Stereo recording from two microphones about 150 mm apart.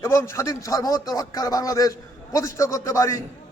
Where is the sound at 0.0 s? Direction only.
20° left (ahead or behind).